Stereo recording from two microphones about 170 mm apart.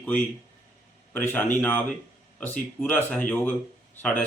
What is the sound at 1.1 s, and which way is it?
Speech, 10° left (ahead or behind).